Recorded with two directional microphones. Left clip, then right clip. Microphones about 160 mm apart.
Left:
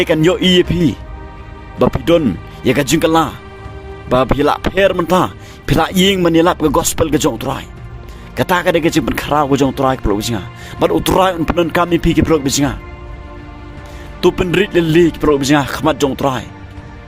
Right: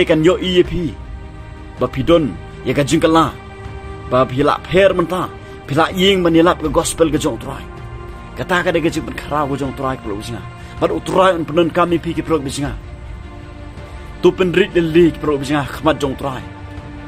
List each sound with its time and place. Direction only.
0.0 s speech: 90° left; by 7.6 s 70° left (ahead or behind)
8.4 s speech: 90° left; by 12.7 s 75° left (ahead or behind)
14.2 s speech: 85° left